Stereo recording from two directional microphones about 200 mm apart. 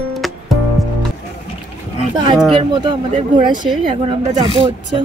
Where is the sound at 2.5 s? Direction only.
25° right (ahead or behind).